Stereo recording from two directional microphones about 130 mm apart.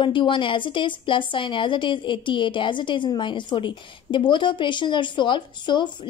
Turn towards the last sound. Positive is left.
turn(degrees=40)  # may be behind; listen again after turning